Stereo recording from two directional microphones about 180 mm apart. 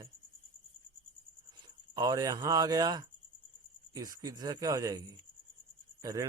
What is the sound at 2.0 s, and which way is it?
A man's voice, 20° right (ahead or behind).